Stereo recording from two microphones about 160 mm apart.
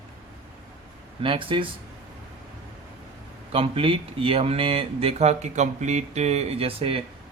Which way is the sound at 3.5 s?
35° right (ahead or behind).